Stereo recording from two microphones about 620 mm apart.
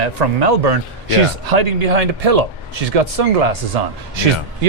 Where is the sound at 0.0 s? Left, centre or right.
Right.